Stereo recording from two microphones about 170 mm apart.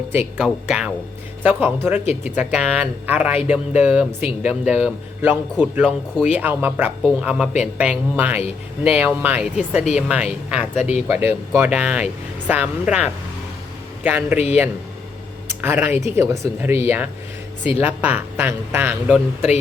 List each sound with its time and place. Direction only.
0.1 s speech: 10° right (ahead or behind)
14.3 s a man's voice: 40° left (ahead or behind)
15.6 s speech: 10° right (ahead or behind)